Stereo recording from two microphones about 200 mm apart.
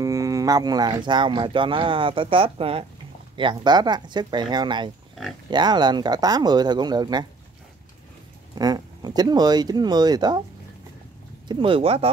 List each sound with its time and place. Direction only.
0.0 s speech: 15° right (ahead or behind)
8.5 s speech: 20° right (ahead or behind)
11.4 s speech: 25° right (ahead or behind)